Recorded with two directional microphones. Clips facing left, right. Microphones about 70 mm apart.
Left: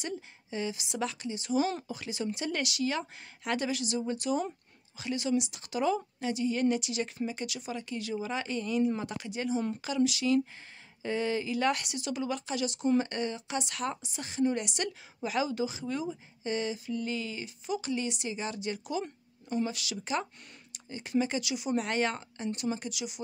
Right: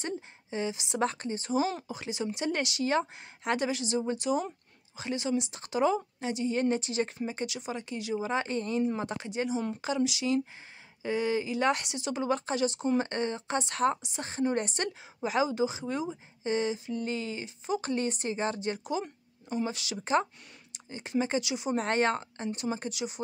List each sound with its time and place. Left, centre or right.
0.0 s a woman's voice: right
1.0 s speech: right
1.9 s a woman's voice: right